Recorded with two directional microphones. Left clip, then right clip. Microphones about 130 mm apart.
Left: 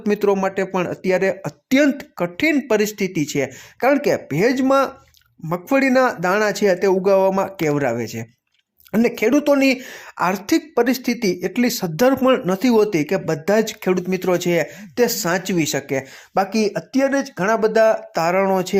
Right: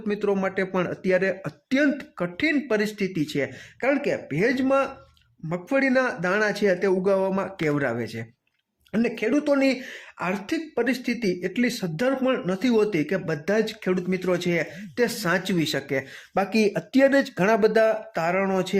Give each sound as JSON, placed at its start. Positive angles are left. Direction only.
{"t": 0.1, "sound": "speech", "side_deg": 40}
{"t": 0.3, "sound": "speech", "side_deg": 30}
{"t": 8.9, "sound": "speech", "side_deg": 40}
{"t": 16.6, "sound": "speech", "side_deg": 0}
{"t": 17.6, "sound": "speech", "side_deg": 15}
{"t": 18.1, "sound": "speech", "side_deg": 25}